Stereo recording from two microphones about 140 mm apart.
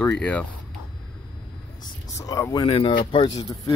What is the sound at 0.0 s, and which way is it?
Speech, 10° left (ahead or behind).